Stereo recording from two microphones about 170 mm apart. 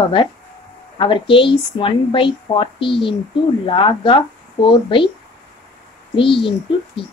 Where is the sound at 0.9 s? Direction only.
30° left (ahead or behind).